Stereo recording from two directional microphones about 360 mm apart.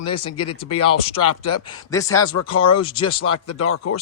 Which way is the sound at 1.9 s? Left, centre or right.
Centre.